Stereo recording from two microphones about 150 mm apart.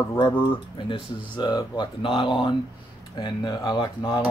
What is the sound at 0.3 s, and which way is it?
Speech, 15° left (ahead or behind).